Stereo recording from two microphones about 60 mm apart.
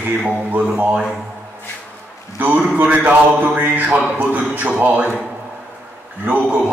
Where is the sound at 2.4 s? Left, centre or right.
Right.